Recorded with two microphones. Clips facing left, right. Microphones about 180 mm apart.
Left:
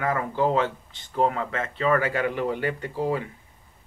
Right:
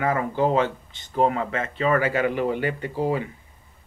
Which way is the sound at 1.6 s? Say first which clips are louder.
Even; 25° right (ahead or behind).